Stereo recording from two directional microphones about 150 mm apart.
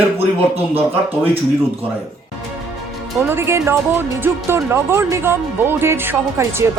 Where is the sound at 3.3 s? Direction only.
15° right (ahead or behind).